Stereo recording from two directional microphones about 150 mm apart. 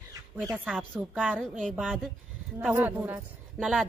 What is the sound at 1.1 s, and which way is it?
A woman's voice, 5° right (ahead or behind).